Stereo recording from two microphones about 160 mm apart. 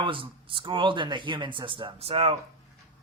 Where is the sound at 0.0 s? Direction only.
30° right (ahead or behind).